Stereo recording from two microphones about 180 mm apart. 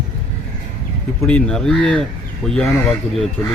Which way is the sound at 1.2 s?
5° left (ahead or behind).